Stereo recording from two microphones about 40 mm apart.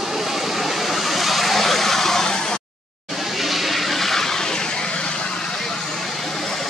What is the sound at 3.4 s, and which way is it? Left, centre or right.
Vehicle, centre.